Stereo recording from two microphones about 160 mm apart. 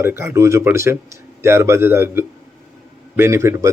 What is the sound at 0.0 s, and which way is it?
Speech, 15° right (ahead or behind).